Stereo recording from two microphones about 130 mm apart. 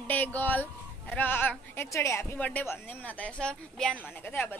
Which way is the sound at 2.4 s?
10° left (ahead or behind).